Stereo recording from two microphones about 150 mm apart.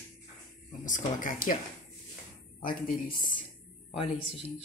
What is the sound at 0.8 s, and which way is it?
Speech, 60° left (ahead or behind).